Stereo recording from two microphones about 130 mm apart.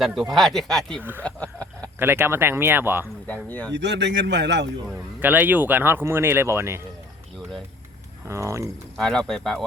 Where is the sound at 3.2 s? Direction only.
15° left (ahead or behind).